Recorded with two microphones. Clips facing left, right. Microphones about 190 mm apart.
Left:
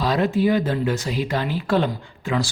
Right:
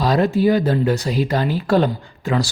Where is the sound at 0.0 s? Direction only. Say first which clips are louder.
Right 3 dB; 40° right (ahead or behind).